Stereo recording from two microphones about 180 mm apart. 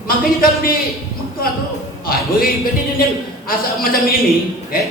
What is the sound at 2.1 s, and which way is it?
Speech, 55° left (ahead or behind).